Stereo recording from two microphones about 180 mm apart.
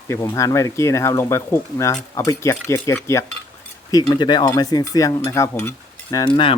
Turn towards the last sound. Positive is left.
turn(degrees=30)  # may be behind; listen again after turning